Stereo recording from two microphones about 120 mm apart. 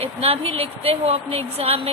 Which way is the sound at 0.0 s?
55° right (ahead or behind).